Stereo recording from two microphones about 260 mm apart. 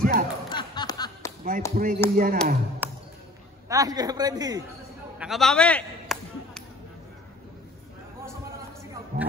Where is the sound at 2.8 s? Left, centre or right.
Centre.